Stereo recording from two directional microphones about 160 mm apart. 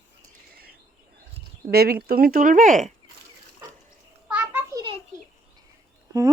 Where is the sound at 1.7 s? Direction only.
75° right (ahead or behind); by 2.8 s 55° right (ahead or behind).